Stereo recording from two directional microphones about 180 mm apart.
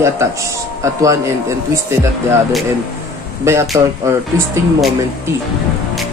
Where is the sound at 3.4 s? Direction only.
15° right (ahead or behind).